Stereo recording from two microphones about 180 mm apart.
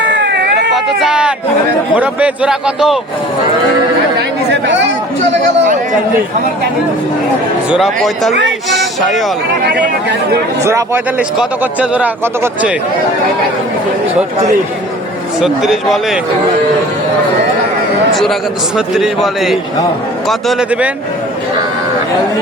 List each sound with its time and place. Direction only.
0.1 s a sound: 65° right (ahead or behind)
0.7 s a sound: 5° right (ahead or behind)
2.0 s a man's voice: 5° right (ahead or behind)
7.7 s a man's voice: centre (ahead or behind)
8.7 s a sound: centre (ahead or behind)
9.6 s speech: 70° right (ahead or behind)
10.6 s speech: 15° right (ahead or behind)
15.4 s a man's voice: centre (ahead or behind)
18.1 s a man's voice: centre (ahead or behind)